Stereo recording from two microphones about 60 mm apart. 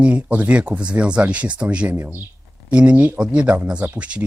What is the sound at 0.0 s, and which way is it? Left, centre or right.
Speech, right.